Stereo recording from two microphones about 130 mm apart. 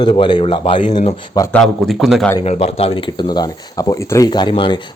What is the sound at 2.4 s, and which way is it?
Speech, 50° left (ahead or behind).